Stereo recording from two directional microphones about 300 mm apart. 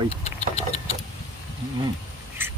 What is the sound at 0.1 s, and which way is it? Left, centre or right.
Engine, left.